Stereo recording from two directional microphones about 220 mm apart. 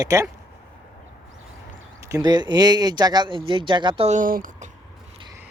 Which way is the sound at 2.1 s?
20° right (ahead or behind).